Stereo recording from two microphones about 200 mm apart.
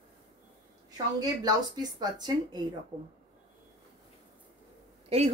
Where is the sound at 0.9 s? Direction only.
20° right (ahead or behind).